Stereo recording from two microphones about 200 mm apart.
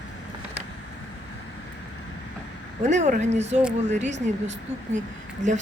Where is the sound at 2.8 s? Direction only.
35° right (ahead or behind).